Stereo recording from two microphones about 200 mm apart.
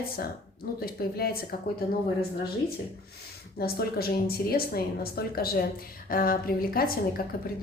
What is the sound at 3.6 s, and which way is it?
Speech, 50° left (ahead or behind).